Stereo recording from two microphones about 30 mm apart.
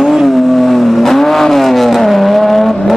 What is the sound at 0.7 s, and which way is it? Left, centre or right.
Vehicle, centre.